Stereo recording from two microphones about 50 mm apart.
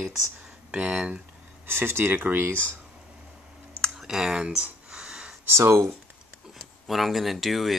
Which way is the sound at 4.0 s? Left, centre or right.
Centre.